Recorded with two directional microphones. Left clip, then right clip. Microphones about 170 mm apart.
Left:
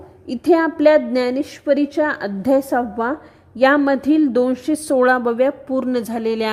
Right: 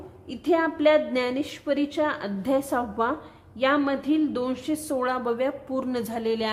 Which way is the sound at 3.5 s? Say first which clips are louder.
Left 9 dB; 40° left (ahead or behind).